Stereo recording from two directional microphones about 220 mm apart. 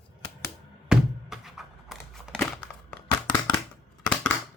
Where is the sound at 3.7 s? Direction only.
5° left (ahead or behind).